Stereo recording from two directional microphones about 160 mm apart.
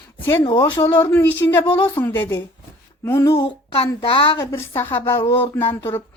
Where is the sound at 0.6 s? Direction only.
20° left (ahead or behind).